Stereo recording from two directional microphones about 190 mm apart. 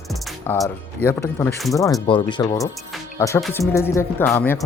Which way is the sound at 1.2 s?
15° left (ahead or behind).